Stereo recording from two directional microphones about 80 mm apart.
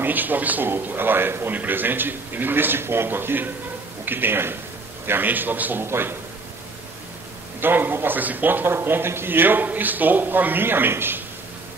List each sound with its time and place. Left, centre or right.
0.0 s a man's voice: right
7.6 s a man's voice: right